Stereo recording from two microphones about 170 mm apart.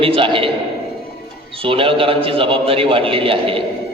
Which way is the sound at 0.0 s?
30° right (ahead or behind).